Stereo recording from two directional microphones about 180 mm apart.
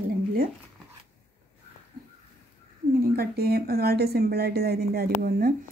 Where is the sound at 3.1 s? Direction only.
60° right (ahead or behind).